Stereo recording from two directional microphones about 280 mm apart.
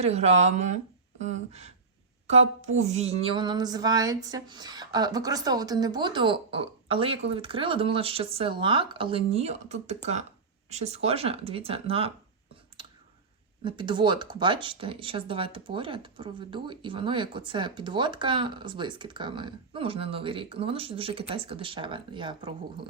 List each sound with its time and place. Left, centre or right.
0.0 s speech: right
13.7 s speech: centre